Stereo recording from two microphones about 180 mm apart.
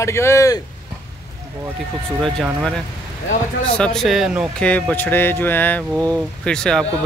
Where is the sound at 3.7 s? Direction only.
5° left (ahead or behind).